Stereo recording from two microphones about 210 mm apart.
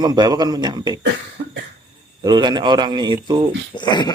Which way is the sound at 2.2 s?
20° right (ahead or behind).